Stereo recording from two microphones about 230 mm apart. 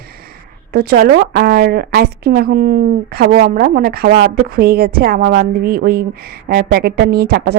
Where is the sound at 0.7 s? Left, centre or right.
Right.